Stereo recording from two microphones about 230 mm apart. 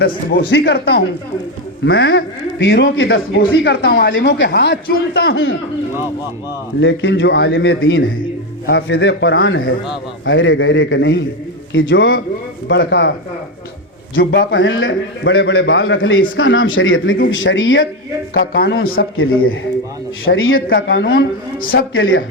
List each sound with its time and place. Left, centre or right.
0.0 s a man's voice: left
7.0 s a man's voice: left
14.2 s a man's voice: left
18.3 s a man's voice: left
18.9 s a man's voice: left